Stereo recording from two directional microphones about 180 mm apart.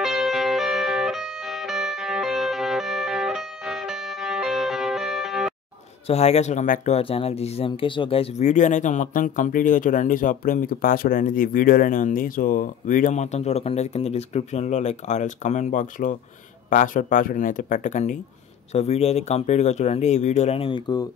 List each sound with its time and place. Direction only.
0.0 s music: centre (ahead or behind)
6.0 s speech: 35° left (ahead or behind)
7.0 s speech: 30° left (ahead or behind)